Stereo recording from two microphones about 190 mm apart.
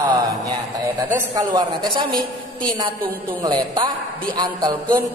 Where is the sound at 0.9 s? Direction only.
20° right (ahead or behind).